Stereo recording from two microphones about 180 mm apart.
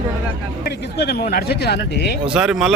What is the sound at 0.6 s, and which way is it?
Speech, 70° left (ahead or behind).